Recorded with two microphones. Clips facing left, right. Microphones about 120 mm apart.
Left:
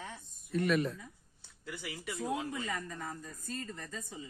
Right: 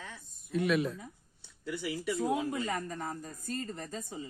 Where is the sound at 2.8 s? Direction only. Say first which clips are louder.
Right 4 dB; 40° right (ahead or behind).